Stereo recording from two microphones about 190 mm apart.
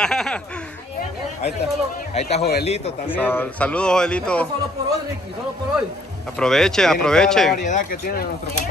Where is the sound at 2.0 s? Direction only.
35° left (ahead or behind).